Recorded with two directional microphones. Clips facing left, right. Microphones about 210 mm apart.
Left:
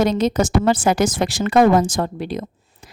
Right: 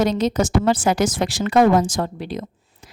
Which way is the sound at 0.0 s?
50° left (ahead or behind).